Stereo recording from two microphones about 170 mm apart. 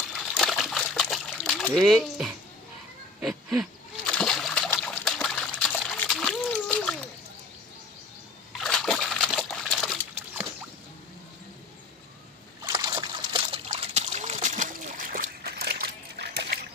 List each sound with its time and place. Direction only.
0.1 s water: centre (ahead or behind)
1.6 s speech: centre (ahead or behind)
3.2 s a sound: centre (ahead or behind)
4.1 s splash: 5° left (ahead or behind)
4.8 s trickle: centre (ahead or behind)
6.7 s splash: 5° left (ahead or behind)
8.5 s splash: centre (ahead or behind)
12.6 s splash: 25° right (ahead or behind); by 16.6 s 70° right (ahead or behind)